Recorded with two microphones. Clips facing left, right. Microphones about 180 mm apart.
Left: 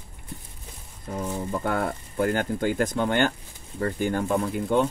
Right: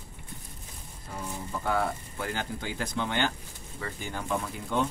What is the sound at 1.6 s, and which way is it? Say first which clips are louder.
Speech: right 2 dB; 55° left (ahead or behind).